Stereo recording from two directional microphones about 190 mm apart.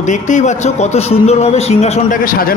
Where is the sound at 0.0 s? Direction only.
40° left (ahead or behind).